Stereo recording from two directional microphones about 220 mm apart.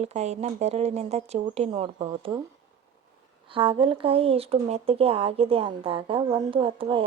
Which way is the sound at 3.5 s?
25° right (ahead or behind).